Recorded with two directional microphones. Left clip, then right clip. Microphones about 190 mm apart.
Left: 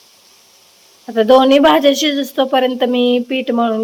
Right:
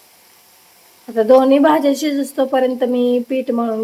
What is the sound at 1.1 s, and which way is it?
Speech, 5° left (ahead or behind).